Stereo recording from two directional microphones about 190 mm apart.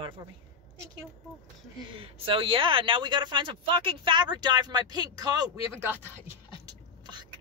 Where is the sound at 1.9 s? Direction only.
30° right (ahead or behind).